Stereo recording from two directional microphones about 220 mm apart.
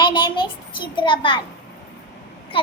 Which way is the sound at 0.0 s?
20° left (ahead or behind).